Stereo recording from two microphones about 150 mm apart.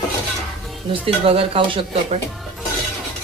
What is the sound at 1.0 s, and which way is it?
Speech, 40° right (ahead or behind).